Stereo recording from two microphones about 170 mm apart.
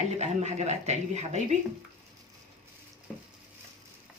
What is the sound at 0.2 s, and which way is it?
Speech, 40° right (ahead or behind).